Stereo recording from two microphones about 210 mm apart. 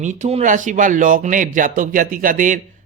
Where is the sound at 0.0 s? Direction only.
30° right (ahead or behind).